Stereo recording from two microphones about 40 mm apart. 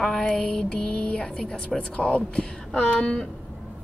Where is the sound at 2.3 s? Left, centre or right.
Left.